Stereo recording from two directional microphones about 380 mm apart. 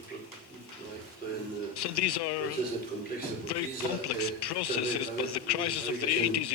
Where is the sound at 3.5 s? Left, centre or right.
Left.